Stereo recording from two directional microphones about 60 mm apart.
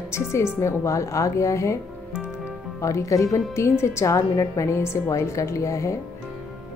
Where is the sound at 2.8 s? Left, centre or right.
Left.